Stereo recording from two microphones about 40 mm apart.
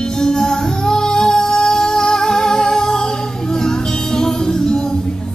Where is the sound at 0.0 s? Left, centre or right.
Centre.